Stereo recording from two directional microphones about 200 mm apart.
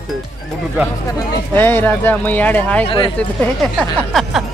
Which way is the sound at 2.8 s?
25° left (ahead or behind).